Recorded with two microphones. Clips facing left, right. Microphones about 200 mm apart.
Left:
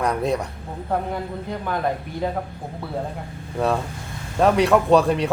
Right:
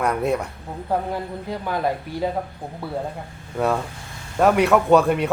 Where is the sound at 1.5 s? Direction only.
5° right (ahead or behind).